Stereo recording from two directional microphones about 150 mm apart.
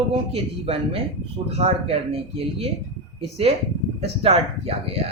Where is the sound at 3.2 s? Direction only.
40° right (ahead or behind).